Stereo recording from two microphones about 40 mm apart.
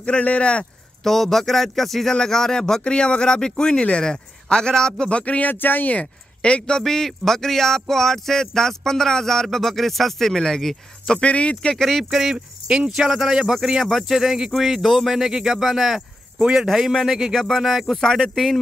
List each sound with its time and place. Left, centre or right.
0.2 s speech: left
1.0 s music: centre
2.1 s speech: centre
5.2 s speech: left
5.5 s speech: left
5.9 s speech: left
6.8 s music: centre
11.1 s speech: left
11.7 s music: centre
12.0 s speech: centre
12.6 s a man's voice: right; by 17.6 s centre
17.6 s a man's voice: centre